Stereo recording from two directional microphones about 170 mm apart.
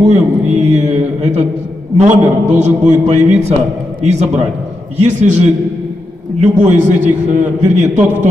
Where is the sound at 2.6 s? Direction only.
40° right (ahead or behind).